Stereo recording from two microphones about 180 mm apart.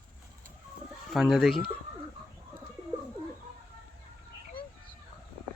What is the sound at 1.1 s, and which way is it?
Speech, centre (ahead or behind).